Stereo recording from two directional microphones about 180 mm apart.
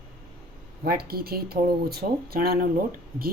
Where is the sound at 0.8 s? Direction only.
55° right (ahead or behind).